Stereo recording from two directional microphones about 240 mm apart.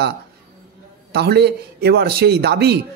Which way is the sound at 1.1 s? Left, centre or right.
Right.